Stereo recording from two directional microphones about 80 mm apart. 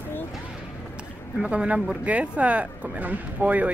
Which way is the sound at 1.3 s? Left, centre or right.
Centre.